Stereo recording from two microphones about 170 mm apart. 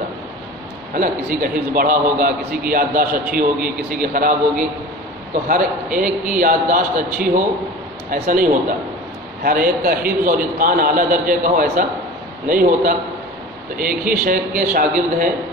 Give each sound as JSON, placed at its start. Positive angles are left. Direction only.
{"t": 0.9, "sound": "a man's voice", "side_deg": -55}